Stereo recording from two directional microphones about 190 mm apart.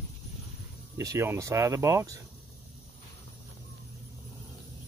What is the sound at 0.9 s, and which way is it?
Speech, 15° right (ahead or behind).